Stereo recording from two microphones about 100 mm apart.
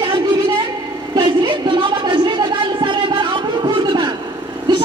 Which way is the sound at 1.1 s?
50° right (ahead or behind).